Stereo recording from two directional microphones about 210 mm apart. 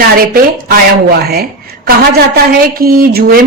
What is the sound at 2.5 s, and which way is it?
Speech, 45° right (ahead or behind).